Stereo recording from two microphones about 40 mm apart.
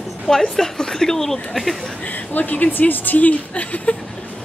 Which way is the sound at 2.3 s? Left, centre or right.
Left.